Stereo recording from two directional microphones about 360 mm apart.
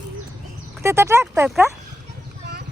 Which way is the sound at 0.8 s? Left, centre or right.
Centre.